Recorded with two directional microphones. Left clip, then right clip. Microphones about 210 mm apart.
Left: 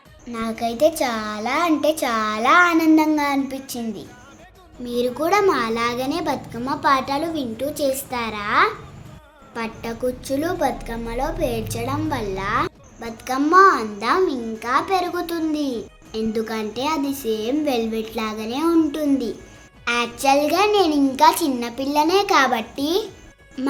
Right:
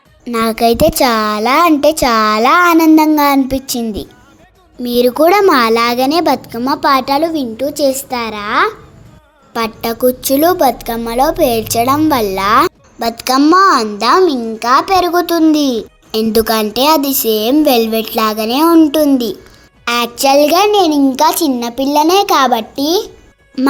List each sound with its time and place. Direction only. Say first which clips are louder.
0.3 s a woman's voice: right 14 dB; 45° right (ahead or behind)
9.5 s a woman's voice: right 11 dB; 45° right (ahead or behind)